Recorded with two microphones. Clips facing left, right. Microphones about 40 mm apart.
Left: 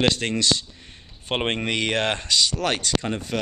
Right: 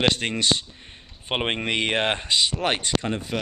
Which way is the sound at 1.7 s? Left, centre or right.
Right.